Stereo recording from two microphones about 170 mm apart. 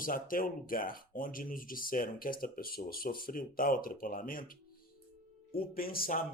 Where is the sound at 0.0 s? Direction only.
55° left (ahead or behind).